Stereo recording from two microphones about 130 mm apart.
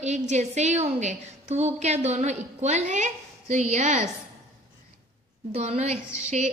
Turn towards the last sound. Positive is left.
turn(degrees=-65)  # may be behind; listen again after turning